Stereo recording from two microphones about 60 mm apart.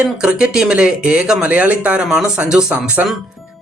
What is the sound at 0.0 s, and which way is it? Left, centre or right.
Speech, centre.